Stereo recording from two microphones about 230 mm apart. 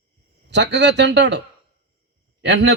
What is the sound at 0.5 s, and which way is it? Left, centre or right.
Speech, right.